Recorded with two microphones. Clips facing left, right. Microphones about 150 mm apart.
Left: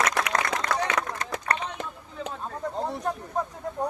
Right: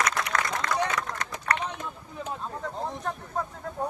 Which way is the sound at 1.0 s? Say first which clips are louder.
Left 3 dB; 65° left (ahead or behind).